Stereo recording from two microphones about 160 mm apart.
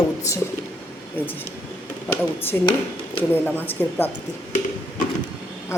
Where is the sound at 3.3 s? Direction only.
10° left (ahead or behind).